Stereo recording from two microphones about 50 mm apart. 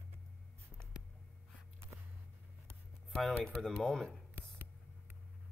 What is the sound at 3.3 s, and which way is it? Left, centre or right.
Speech, centre.